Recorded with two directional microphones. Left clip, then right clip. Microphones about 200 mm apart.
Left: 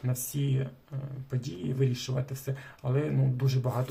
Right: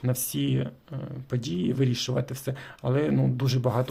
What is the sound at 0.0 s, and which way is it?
A man's voice, 40° right (ahead or behind).